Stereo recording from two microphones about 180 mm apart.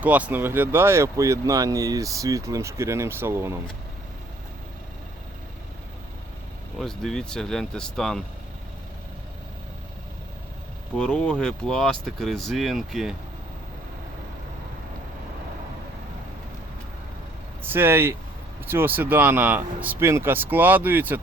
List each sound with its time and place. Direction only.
0.0 s speech: 10° right (ahead or behind)
6.7 s speech: centre (ahead or behind)
10.9 s speech: 5° left (ahead or behind)
17.6 s speech: 10° right (ahead or behind)